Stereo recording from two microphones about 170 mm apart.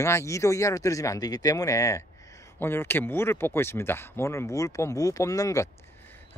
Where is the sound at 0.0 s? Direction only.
15° left (ahead or behind).